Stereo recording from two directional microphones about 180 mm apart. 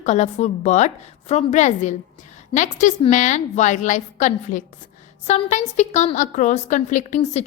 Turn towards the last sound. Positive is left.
turn(degrees=40)  # may be behind; listen again after turning